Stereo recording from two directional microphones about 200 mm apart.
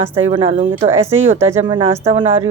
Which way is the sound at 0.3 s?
25° right (ahead or behind).